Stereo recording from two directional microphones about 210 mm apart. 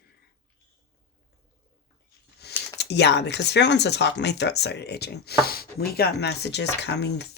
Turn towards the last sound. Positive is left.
turn(degrees=55)  # may be behind; listen again after turning